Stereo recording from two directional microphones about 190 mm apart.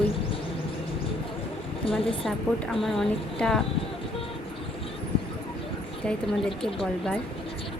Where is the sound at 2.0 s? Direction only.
30° left (ahead or behind).